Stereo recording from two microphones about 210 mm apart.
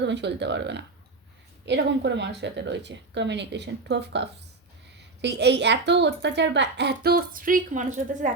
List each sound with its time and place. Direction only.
0.0 s a woman's voice: 55° right (ahead or behind); by 8.3 s 35° right (ahead or behind)